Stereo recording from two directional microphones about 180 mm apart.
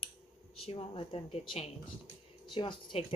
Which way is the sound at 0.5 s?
30° left (ahead or behind).